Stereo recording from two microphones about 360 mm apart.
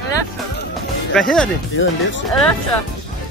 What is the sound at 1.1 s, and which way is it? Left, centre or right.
Speech, centre.